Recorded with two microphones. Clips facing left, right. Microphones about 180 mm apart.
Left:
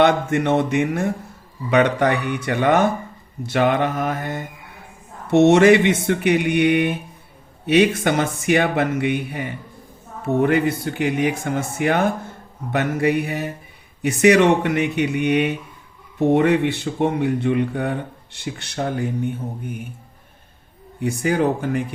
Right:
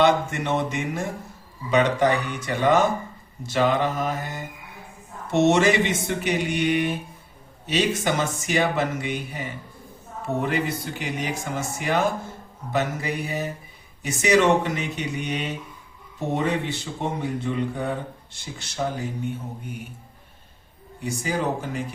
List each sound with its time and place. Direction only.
0.0 s a man's voice: 60° left (ahead or behind)
21.0 s a man's voice: 60° left (ahead or behind)